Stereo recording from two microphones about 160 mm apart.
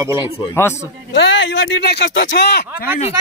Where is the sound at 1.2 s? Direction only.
90° left.